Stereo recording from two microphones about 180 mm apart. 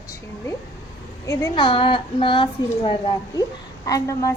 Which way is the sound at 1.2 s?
20° left (ahead or behind).